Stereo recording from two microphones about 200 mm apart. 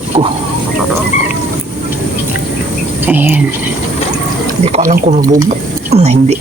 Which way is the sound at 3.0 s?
10° right (ahead or behind).